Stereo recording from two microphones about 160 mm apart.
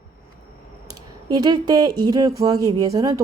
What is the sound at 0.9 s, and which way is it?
Speech, 25° right (ahead or behind).